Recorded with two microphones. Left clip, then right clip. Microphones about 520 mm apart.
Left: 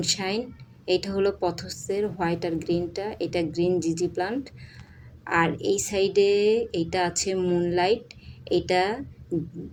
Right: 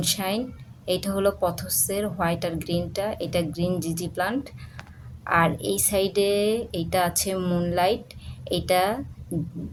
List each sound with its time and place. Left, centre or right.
0.0 s a woman's voice: right